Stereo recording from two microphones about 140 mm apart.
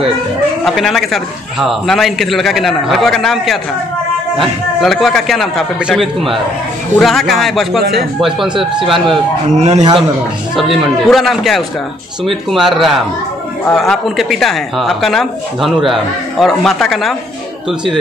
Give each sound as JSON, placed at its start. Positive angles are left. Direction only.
{"t": 0.7, "sound": "speech", "side_deg": 0}
{"t": 4.8, "sound": "speech", "side_deg": 0}
{"t": 9.6, "sound": "a man's voice", "side_deg": -50}
{"t": 10.5, "sound": "speech", "side_deg": 0}